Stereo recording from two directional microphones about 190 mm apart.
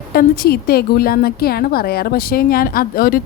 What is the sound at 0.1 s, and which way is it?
A woman's voice, 50° left (ahead or behind).